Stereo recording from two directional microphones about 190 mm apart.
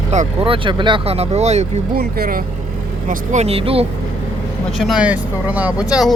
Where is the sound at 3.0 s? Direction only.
35° right (ahead or behind).